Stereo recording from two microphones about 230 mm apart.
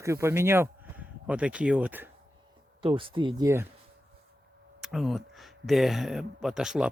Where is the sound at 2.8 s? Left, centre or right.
Right.